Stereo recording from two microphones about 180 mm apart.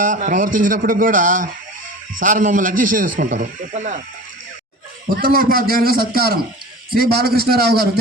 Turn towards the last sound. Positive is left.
turn(degrees=-55)  # may be behind; listen again after turning